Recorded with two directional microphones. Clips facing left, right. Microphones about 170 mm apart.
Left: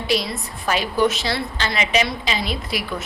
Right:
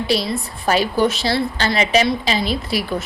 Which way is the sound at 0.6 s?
35° right (ahead or behind).